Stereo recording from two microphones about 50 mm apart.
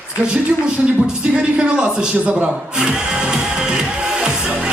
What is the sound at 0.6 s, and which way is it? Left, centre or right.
A man's voice, centre.